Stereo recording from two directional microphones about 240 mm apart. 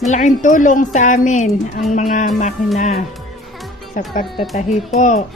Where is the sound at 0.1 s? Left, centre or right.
Left.